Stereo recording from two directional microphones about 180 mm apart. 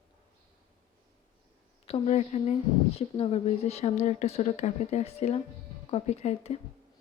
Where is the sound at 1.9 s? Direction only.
35° left (ahead or behind).